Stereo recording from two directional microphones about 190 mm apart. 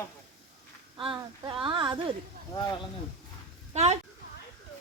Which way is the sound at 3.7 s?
35° right (ahead or behind).